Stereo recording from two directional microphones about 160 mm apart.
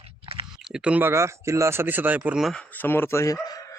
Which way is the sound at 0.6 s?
5° right (ahead or behind).